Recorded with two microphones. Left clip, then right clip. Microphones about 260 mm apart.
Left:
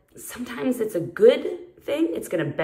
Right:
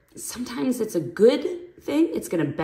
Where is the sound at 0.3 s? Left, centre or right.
Centre.